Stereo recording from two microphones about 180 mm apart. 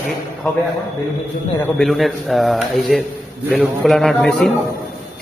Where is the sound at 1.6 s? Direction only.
Centre (ahead or behind).